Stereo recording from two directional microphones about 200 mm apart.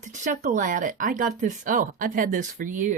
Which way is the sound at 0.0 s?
40° right (ahead or behind).